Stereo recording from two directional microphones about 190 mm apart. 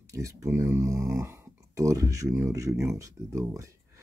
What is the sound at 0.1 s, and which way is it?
Speech, 15° right (ahead or behind).